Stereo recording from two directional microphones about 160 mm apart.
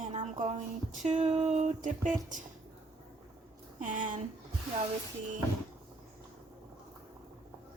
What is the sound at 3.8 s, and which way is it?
Music, 55° right (ahead or behind).